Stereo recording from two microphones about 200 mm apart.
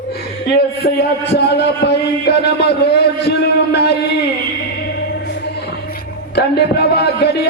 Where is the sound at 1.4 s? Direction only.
55° left (ahead or behind).